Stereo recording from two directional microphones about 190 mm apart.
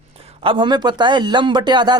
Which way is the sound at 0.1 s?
30° right (ahead or behind).